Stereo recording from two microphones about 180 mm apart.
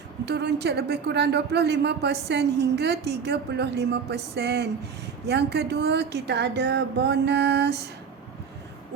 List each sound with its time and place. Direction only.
0.3 s speech: 70° right (ahead or behind)